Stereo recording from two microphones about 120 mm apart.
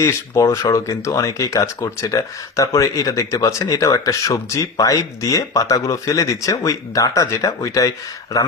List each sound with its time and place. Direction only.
0.0 s speech: 25° left (ahead or behind)